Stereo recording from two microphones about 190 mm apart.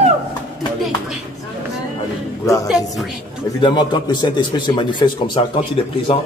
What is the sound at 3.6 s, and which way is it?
Speech, 25° left (ahead or behind).